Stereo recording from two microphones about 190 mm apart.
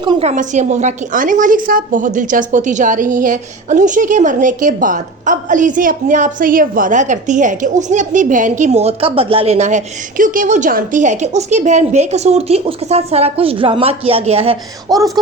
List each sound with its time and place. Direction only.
0.0 s a woman's voice: 25° right (ahead or behind)
0.3 s a woman's voice: 35° right (ahead or behind)